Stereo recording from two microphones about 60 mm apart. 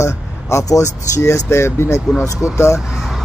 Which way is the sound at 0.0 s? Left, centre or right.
Left.